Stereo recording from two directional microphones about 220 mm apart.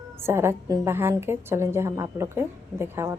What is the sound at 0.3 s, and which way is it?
A woman's voice, 10° right (ahead or behind).